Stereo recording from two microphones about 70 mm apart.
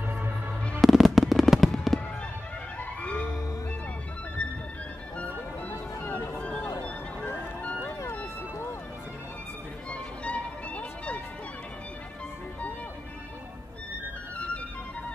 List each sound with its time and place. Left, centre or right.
0.7 s fireworks: centre
3.0 s music: centre
6.4 s a sound: centre
7.2 s music: left
9.8 s music: centre